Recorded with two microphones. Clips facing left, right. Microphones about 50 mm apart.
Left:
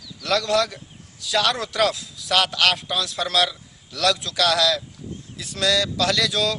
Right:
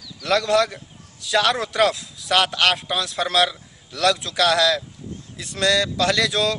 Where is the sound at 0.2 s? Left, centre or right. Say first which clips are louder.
Right 2 dB; centre.